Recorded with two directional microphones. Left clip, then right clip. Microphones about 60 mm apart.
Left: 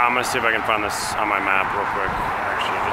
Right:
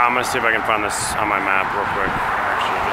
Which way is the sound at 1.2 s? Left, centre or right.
Centre.